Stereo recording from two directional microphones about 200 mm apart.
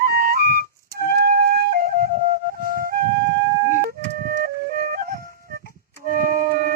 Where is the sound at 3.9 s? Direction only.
45° right (ahead or behind).